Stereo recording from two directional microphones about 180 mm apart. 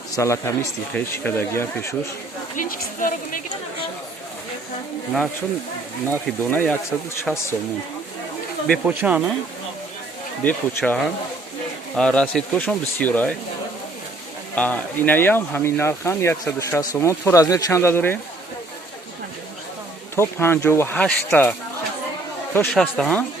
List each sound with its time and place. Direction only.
0.2 s speech: 15° left (ahead or behind)
2.6 s a woman's voice: 50° left (ahead or behind)
6.1 s speech: 10° left (ahead or behind)
8.8 s speech: 10° right (ahead or behind)
10.4 s speech: 10° left (ahead or behind)
14.5 s speech: 10° left (ahead or behind)
20.1 s speech: 15° left (ahead or behind)
22.5 s speech: 10° left (ahead or behind)